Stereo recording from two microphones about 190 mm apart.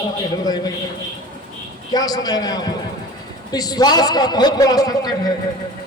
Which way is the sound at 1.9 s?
20° left (ahead or behind).